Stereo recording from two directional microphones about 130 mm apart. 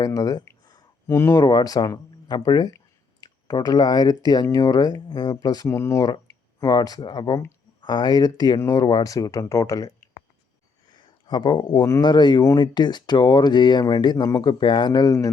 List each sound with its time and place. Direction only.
0.0 s a sound: 30° left (ahead or behind)
1.0 s speech: 20° left (ahead or behind)
10.9 s speech: 35° left (ahead or behind)